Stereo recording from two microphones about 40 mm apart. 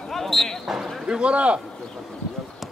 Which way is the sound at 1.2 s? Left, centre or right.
Right.